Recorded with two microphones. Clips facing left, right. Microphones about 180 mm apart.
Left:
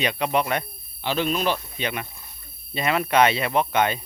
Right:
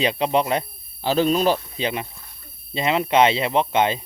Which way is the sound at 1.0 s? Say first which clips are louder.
Right 5 dB; 40° right (ahead or behind).